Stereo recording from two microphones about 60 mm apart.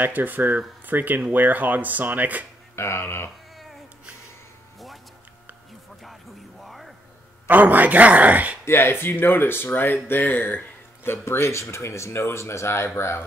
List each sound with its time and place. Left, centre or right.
0.0 s speech: right
2.7 s speech: left
6.6 s music: centre
7.4 s speech: right
8.6 s speech: left